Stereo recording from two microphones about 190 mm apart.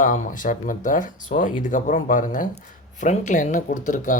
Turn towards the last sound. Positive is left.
turn(degrees=40)  # may be behind; listen again after turning